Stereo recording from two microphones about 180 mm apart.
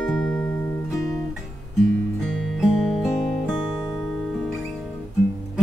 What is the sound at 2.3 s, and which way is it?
Music, centre (ahead or behind).